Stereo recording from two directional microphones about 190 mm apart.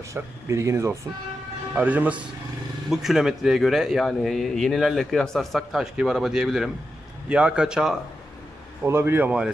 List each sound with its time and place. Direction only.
0.1 s a man's voice: 15° right (ahead or behind)